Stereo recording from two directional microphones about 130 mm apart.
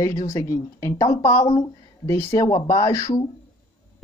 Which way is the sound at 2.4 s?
30° left (ahead or behind).